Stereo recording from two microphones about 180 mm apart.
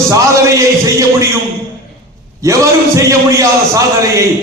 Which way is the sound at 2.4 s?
15° right (ahead or behind).